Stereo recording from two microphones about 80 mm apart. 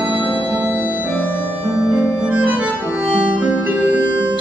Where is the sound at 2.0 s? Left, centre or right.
Centre.